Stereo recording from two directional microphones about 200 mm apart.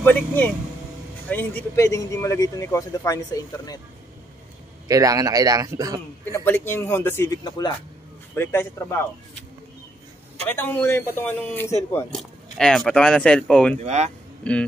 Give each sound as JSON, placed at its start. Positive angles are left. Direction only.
{"t": 0.0, "sound": "speech", "side_deg": 10}
{"t": 4.8, "sound": "speech", "side_deg": -15}
{"t": 6.3, "sound": "speech", "side_deg": 10}
{"t": 10.5, "sound": "speech", "side_deg": 10}
{"t": 13.7, "sound": "speech", "side_deg": -35}
{"t": 14.4, "sound": "a man's voice", "side_deg": 5}